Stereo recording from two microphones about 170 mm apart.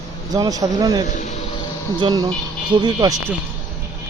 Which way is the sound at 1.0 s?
45° left (ahead or behind).